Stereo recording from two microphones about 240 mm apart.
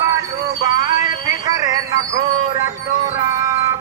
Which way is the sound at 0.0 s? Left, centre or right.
Centre.